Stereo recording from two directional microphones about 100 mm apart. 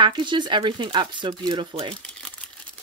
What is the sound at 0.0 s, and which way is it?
Speech, 50° right (ahead or behind).